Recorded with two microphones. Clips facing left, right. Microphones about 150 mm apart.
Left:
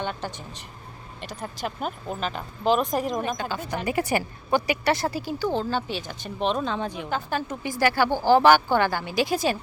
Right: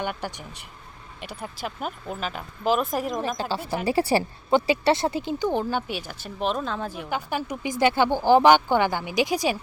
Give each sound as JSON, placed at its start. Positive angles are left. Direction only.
{"t": 0.0, "sound": "speech", "side_deg": -15}
{"t": 3.8, "sound": "speech", "side_deg": -30}
{"t": 7.1, "sound": "speech", "side_deg": -15}